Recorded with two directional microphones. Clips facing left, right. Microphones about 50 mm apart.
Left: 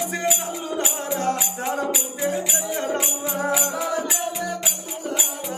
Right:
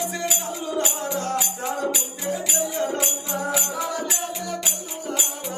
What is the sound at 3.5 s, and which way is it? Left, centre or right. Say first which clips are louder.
Music: left 3 dB; centre.